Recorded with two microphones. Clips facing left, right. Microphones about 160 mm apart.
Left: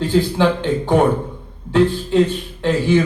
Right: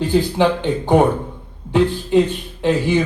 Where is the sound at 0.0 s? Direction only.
15° right (ahead or behind).